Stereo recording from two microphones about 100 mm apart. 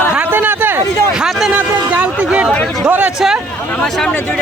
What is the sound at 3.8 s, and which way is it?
Speech, 5° left (ahead or behind).